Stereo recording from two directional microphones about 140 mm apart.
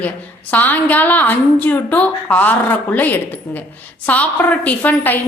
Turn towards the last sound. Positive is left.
turn(degrees=10)  # may be behind; listen again after turning